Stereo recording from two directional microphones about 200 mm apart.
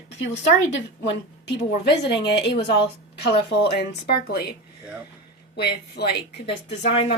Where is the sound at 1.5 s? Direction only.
55° left (ahead or behind).